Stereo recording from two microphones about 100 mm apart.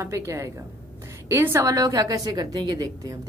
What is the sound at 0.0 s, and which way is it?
A woman's voice, 30° right (ahead or behind).